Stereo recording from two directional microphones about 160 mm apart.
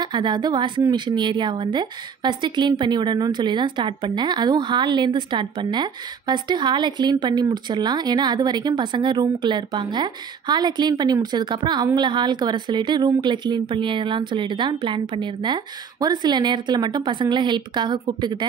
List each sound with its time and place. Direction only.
0.0 s a woman's voice: 30° right (ahead or behind)